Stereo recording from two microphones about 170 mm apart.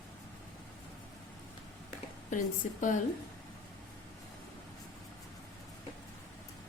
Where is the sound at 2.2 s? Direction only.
50° left (ahead or behind).